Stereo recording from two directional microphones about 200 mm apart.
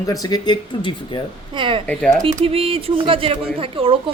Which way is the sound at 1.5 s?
25° right (ahead or behind).